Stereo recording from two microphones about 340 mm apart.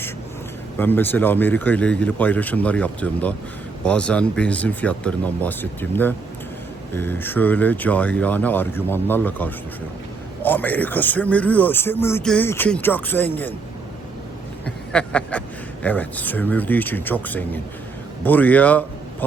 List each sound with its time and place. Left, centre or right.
0.8 s speech: centre
6.9 s speech: centre
14.9 s speech: centre